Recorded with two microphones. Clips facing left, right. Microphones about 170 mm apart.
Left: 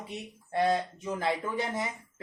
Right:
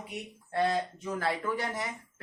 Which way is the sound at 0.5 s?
20° left (ahead or behind).